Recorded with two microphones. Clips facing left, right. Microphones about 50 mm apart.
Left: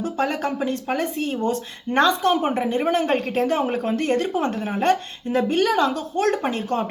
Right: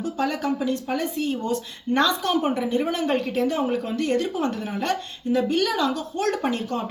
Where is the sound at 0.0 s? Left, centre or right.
Left.